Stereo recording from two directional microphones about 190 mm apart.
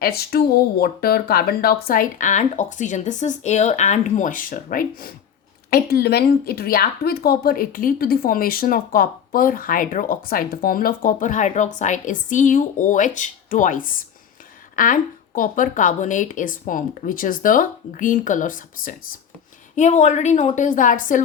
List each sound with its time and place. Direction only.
0.0 s a woman's voice: 55° left (ahead or behind)